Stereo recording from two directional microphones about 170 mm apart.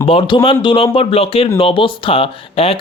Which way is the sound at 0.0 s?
35° left (ahead or behind).